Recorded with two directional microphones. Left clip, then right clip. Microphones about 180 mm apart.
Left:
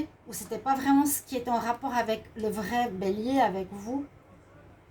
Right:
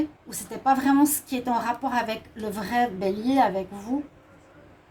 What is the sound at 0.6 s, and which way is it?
A woman's voice, 40° right (ahead or behind).